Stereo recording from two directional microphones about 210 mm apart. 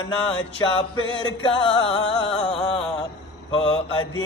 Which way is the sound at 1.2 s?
25° left (ahead or behind).